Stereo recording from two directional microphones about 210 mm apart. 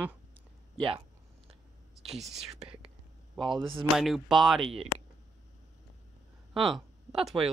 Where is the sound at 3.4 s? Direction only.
25° right (ahead or behind).